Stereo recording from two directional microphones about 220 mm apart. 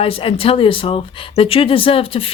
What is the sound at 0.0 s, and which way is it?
Speech, 25° left (ahead or behind).